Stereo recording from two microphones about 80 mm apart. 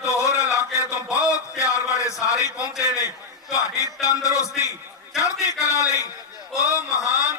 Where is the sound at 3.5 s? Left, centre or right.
Left.